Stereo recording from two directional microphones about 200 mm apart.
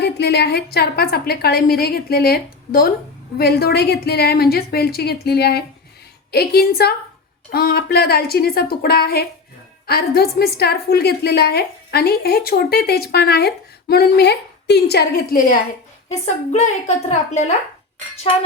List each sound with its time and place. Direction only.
0.0 s a woman's voice: 55° left (ahead or behind)
16.2 s a woman's voice: 35° left (ahead or behind)